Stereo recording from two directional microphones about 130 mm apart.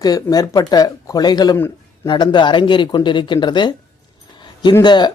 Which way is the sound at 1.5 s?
20° left (ahead or behind).